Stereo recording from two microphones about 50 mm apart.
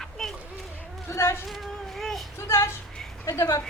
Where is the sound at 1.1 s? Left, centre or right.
Left.